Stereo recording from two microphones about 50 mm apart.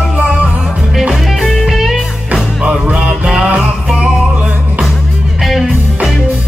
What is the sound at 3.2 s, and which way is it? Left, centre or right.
Music, centre.